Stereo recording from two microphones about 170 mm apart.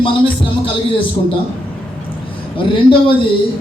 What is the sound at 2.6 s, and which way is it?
Speech, 30° left (ahead or behind).